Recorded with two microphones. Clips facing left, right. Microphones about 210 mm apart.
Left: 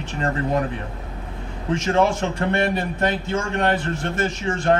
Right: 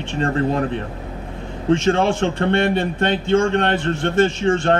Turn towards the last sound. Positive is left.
turn(degrees=-30)  # may be behind; listen again after turning